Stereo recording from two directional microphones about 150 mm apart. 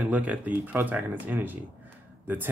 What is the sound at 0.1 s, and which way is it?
Speech, 10° right (ahead or behind).